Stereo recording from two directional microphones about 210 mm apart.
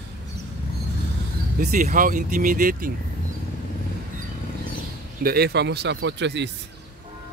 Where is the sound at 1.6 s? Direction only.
40° right (ahead or behind).